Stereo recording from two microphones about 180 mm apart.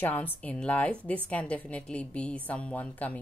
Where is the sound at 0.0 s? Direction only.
10° left (ahead or behind).